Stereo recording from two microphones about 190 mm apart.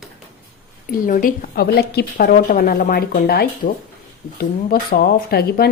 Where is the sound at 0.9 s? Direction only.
45° left (ahead or behind).